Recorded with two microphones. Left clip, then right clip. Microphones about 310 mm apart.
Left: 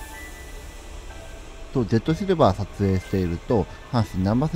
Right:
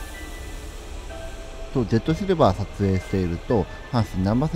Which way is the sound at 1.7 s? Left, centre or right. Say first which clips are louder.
Even; centre.